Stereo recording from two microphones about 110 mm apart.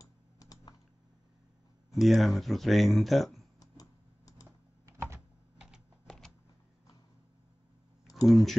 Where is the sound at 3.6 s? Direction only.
35° left (ahead or behind).